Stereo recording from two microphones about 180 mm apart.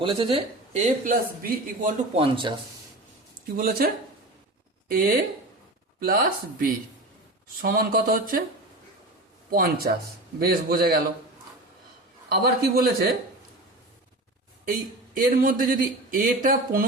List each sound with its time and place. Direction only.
0.0 s speech: 30° right (ahead or behind); by 1.9 s 50° right (ahead or behind)
2.1 s speech: 30° right (ahead or behind)
3.6 s a man's voice: 55° right (ahead or behind)
9.5 s a man's voice: 55° right (ahead or behind)
12.3 s a man's voice: 60° right (ahead or behind)
14.7 s speech: 50° right (ahead or behind)